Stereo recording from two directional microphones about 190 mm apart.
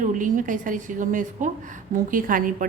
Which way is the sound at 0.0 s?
45° right (ahead or behind).